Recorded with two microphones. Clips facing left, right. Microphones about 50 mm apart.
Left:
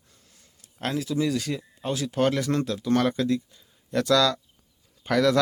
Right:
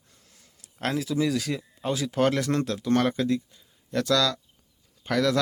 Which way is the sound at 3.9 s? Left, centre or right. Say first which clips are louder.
Left 3 dB; centre.